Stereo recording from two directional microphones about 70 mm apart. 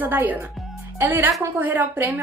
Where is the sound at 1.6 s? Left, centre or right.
Right.